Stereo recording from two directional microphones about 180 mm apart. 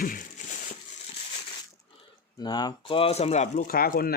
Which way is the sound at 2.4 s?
25° left (ahead or behind).